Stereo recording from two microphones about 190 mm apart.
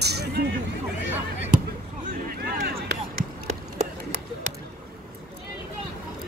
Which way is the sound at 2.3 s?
50° right (ahead or behind).